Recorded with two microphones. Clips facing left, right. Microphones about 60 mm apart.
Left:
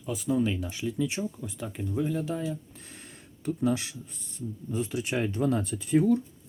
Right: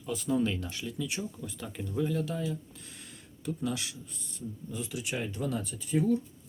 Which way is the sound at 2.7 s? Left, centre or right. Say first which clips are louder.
Left 2 dB; left.